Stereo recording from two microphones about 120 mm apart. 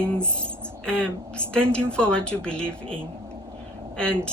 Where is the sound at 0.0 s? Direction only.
10° left (ahead or behind).